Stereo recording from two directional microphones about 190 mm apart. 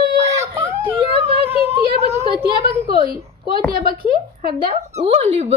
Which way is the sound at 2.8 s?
50° right (ahead or behind).